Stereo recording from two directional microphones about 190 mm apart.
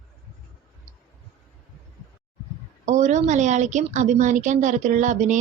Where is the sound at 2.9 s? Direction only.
40° right (ahead or behind).